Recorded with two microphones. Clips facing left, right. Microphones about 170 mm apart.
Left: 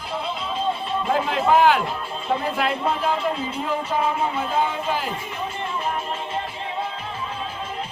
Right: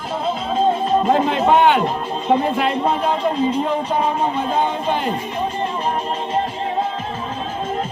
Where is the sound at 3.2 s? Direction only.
35° right (ahead or behind).